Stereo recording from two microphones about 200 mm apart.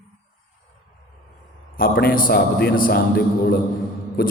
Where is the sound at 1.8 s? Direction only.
45° left (ahead or behind).